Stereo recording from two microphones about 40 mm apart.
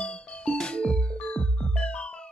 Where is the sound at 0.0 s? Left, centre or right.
Left.